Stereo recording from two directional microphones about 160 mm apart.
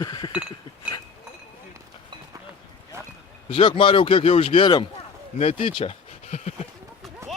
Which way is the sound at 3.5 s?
35° left (ahead or behind).